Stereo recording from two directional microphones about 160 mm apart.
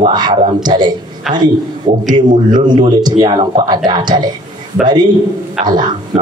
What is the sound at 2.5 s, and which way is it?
Speech, 25° right (ahead or behind).